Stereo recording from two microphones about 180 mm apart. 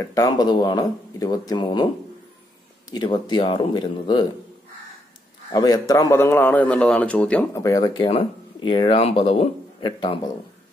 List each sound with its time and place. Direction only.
0.0 s speech: 20° left (ahead or behind)
2.9 s speech: 25° left (ahead or behind)
5.5 s a man's voice: 20° left (ahead or behind)
7.6 s speech: 20° left (ahead or behind)